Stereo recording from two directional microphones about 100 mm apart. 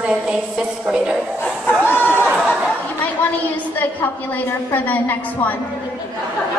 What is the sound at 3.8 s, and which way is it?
A woman's voice, 20° left (ahead or behind).